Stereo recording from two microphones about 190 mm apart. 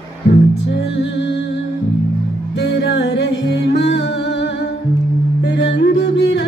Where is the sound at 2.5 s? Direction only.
65° left (ahead or behind).